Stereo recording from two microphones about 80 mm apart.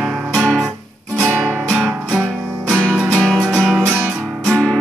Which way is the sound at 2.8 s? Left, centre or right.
Centre.